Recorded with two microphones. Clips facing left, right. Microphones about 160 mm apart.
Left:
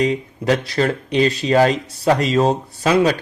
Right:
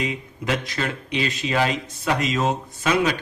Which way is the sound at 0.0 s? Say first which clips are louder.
Left 8 dB; 35° left (ahead or behind).